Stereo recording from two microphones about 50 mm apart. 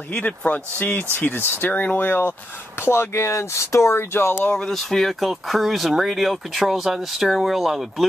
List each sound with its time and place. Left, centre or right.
0.1 s speech: left
1.7 s speech: left
2.0 s speech: left
2.8 s speech: left
4.6 s speech: centre